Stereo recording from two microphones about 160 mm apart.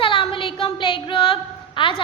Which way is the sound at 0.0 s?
35° left (ahead or behind).